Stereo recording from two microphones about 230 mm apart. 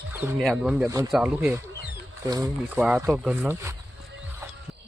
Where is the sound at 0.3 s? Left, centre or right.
Centre.